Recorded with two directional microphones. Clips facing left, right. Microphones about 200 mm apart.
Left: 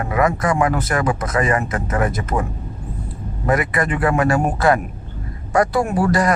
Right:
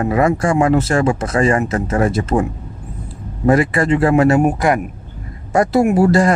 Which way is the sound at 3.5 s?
30° right (ahead or behind).